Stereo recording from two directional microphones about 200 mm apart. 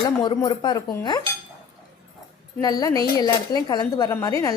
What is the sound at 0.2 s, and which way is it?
Speech, 20° left (ahead or behind).